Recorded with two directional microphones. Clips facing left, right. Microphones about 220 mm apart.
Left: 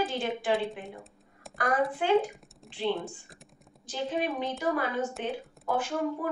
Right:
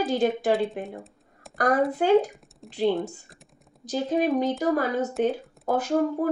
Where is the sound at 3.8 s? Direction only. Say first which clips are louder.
Right 7 dB; 40° right (ahead or behind).